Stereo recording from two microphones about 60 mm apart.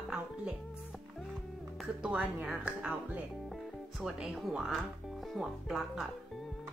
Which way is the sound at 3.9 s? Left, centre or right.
Centre.